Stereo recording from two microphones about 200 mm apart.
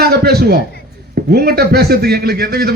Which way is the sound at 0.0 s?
50° right (ahead or behind).